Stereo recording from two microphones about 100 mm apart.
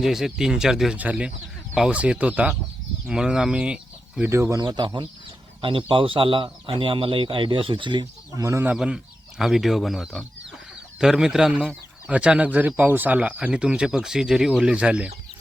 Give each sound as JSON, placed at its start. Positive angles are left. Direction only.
{"t": 0.0, "sound": "speech", "side_deg": -5}
{"t": 4.3, "sound": "speech", "side_deg": -30}
{"t": 4.6, "sound": "speech", "side_deg": -45}
{"t": 5.6, "sound": "speech", "side_deg": -60}
{"t": 8.4, "sound": "speech", "side_deg": -30}
{"t": 8.6, "sound": "speech", "side_deg": -10}